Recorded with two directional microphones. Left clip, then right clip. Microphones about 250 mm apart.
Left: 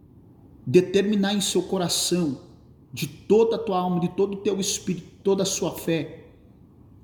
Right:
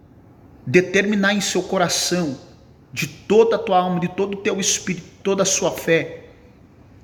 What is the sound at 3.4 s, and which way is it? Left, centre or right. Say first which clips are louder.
Speech: right 6 dB; centre.